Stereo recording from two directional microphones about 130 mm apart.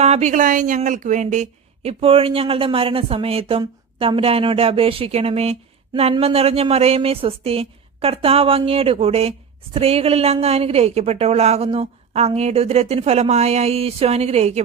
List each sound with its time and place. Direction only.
0.0 s a woman's voice: 60° right (ahead or behind)